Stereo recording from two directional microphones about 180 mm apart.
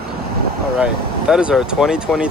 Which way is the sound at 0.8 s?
5° right (ahead or behind).